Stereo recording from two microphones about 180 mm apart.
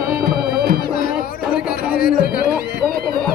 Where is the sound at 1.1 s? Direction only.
5° right (ahead or behind).